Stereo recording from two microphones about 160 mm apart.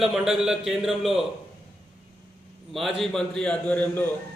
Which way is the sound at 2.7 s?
Centre (ahead or behind).